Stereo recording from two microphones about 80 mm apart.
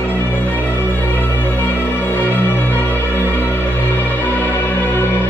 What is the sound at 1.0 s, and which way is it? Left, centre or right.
Music, left.